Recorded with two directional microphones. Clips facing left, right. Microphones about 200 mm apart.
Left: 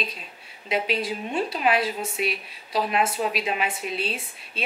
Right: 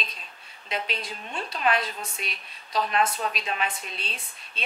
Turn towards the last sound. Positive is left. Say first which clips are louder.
# left 8 dB
turn(degrees=5)  # may be behind; listen again after turning